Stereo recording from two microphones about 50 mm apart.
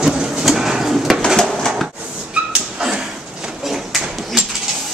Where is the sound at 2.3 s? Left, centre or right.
Right.